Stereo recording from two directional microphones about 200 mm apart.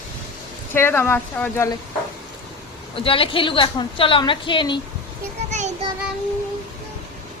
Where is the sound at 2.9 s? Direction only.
25° left (ahead or behind).